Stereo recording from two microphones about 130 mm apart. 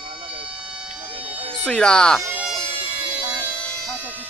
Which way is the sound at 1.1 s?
10° right (ahead or behind).